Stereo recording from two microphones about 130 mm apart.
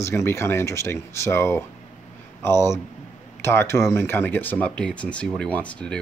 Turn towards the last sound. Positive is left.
turn(degrees=10)  # may be behind; listen again after turning